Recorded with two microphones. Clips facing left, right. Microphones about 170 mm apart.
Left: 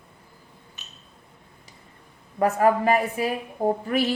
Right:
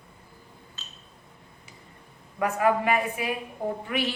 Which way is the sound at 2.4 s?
40° left (ahead or behind).